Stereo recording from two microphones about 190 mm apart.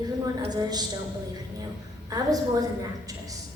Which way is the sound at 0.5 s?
20° right (ahead or behind).